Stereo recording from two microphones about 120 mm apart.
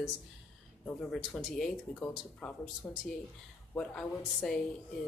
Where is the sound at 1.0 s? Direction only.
5° left (ahead or behind).